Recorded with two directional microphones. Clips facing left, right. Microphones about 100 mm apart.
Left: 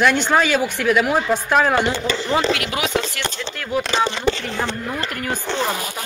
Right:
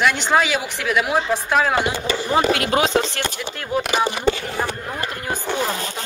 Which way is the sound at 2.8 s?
30° right (ahead or behind).